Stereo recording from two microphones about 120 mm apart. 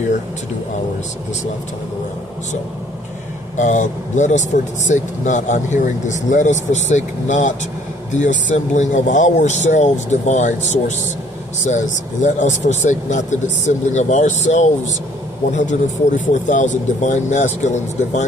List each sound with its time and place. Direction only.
3.5 s speech: 90° left
11.6 s speech: 90° left